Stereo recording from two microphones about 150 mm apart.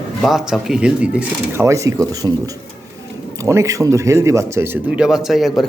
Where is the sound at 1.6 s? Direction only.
20° right (ahead or behind); by 5.6 s centre (ahead or behind).